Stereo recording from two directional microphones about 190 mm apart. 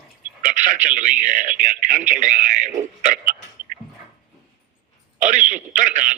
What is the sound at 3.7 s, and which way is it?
Dog, 45° right (ahead or behind).